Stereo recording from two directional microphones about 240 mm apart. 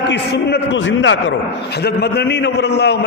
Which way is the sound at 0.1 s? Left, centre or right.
Left.